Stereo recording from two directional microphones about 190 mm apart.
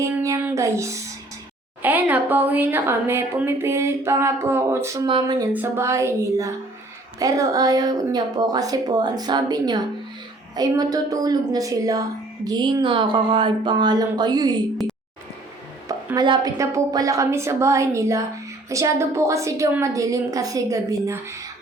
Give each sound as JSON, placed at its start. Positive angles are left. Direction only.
{"t": 0.0, "sound": "music", "side_deg": -15}
{"t": 1.8, "sound": "speech", "side_deg": -10}
{"t": 5.0, "sound": "a woman's voice", "side_deg": -25}
{"t": 15.9, "sound": "speech", "side_deg": -20}